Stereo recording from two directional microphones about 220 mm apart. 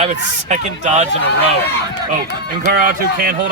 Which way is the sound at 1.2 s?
50° left (ahead or behind).